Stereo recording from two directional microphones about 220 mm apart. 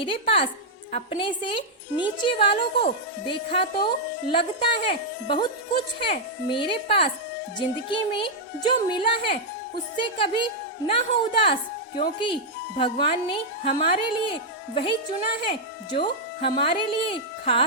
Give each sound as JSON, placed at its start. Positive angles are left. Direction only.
{"t": 0.0, "sound": "a woman's voice", "side_deg": 25}
{"t": 15.4, "sound": "a woman's voice", "side_deg": 20}